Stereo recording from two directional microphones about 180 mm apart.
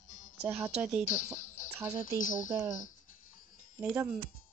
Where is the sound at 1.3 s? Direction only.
45° left (ahead or behind).